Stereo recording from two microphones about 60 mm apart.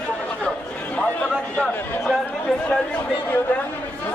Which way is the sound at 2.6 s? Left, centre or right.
Centre.